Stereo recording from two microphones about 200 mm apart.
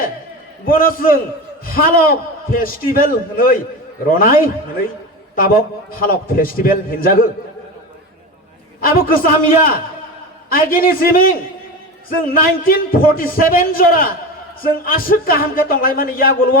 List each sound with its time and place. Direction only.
0.6 s a man's voice: 45° left (ahead or behind)
8.8 s a man's voice: 45° left (ahead or behind)